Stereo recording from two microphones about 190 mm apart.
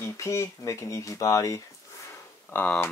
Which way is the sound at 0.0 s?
15° left (ahead or behind).